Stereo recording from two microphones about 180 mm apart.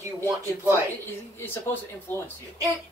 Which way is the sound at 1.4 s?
10° left (ahead or behind).